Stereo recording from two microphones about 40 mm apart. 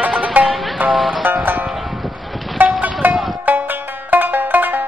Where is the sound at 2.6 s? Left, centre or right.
Right.